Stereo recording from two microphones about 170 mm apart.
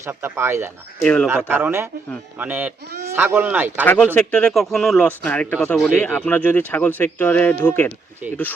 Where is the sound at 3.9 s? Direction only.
5° left (ahead or behind).